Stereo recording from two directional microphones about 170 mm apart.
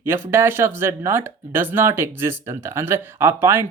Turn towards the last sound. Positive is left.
turn(degrees=-15)  # may be behind; listen again after turning